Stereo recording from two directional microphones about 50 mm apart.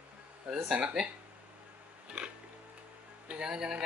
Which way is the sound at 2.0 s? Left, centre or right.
Centre.